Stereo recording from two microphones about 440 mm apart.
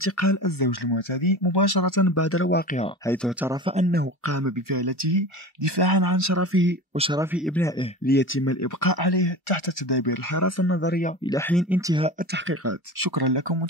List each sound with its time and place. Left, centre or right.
0.0 s speech: left; by 2.9 s centre
3.1 s speech: centre
4.3 s speech: right
7.0 s speech: centre
8.0 s speech: left
8.6 s speech: left
10.3 s speech: left; by 11.3 s centre
11.3 s speech: centre
11.9 s speech: centre
13.0 s speech: right